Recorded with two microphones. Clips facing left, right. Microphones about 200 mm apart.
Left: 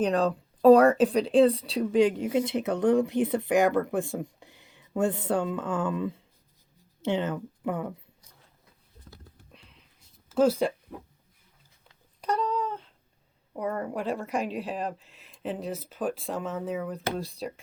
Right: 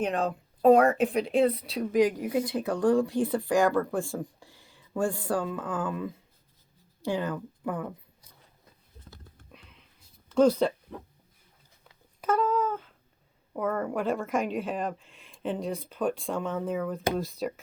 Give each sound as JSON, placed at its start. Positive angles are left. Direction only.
{"t": 0.0, "sound": "speech", "side_deg": 35}
{"t": 7.0, "sound": "speech", "side_deg": 25}
{"t": 9.5, "sound": "a sound", "side_deg": -5}
{"t": 10.2, "sound": "speech", "side_deg": 5}
{"t": 12.2, "sound": "a sound", "side_deg": -5}
{"t": 13.7, "sound": "speech", "side_deg": 0}